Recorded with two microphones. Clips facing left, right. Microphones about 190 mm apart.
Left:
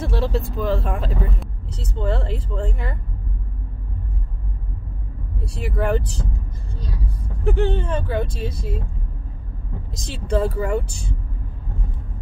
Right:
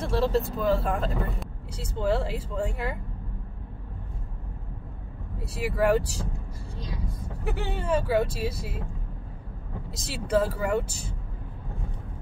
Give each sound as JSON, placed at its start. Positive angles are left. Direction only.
{"t": 0.0, "sound": "vehicle", "side_deg": 0}
{"t": 0.6, "sound": "speech", "side_deg": 0}
{"t": 5.4, "sound": "speech", "side_deg": -5}
{"t": 7.4, "sound": "speech", "side_deg": -10}
{"t": 9.9, "sound": "speech", "side_deg": -5}